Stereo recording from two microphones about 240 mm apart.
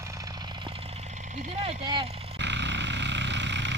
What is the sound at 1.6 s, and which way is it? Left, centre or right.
Vehicle, centre.